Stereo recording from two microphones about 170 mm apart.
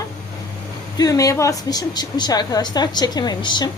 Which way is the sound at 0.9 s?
20° left (ahead or behind).